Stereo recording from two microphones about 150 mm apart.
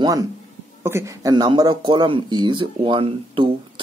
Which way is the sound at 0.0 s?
25° right (ahead or behind).